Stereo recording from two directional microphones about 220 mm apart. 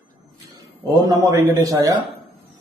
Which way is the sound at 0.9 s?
15° right (ahead or behind).